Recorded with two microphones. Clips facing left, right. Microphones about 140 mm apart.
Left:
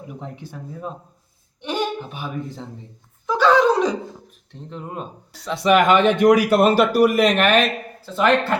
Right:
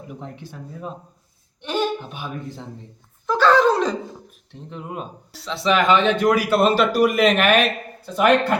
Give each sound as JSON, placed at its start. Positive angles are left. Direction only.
{"t": 1.6, "sound": "speech", "side_deg": 15}
{"t": 3.2, "sound": "a sound", "side_deg": 15}
{"t": 4.7, "sound": "speech", "side_deg": -5}
{"t": 5.5, "sound": "speech", "side_deg": 15}